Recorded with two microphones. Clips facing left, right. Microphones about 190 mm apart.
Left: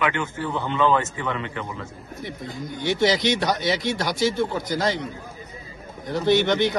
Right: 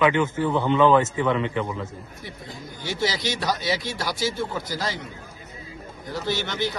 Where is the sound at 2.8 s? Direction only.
20° left (ahead or behind).